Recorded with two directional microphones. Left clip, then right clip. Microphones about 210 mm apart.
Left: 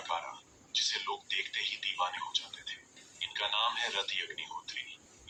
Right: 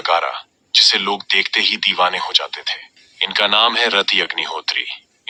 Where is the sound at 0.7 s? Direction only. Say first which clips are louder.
Right 19 dB; 45° right (ahead or behind).